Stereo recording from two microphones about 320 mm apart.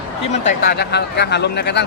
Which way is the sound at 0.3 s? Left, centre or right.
Left.